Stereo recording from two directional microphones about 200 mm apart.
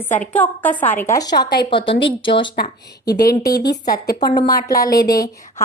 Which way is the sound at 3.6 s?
50° left (ahead or behind).